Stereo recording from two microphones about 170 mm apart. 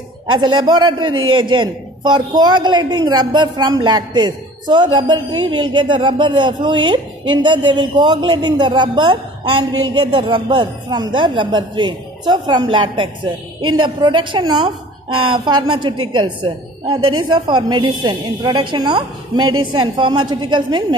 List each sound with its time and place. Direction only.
0.3 s a man's voice: 25° right (ahead or behind)